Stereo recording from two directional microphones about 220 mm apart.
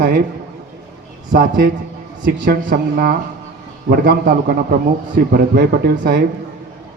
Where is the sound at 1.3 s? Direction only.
40° right (ahead or behind).